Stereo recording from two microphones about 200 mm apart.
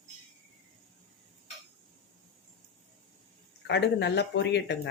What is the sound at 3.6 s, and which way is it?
Speech, 60° left (ahead or behind).